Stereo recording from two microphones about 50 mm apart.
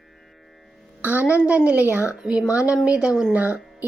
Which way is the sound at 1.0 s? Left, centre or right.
Right.